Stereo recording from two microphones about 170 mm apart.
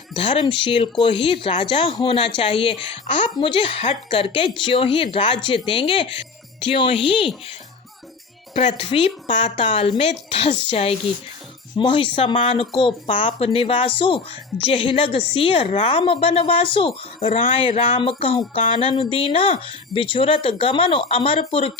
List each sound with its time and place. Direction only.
0.2 s a woman's voice: 30° left (ahead or behind)
8.5 s a woman's voice: 30° left (ahead or behind)